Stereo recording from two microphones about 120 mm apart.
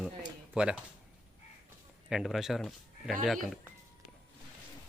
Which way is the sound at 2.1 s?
Centre (ahead or behind).